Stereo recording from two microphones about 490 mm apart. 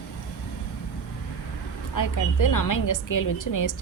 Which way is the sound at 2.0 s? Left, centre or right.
Left.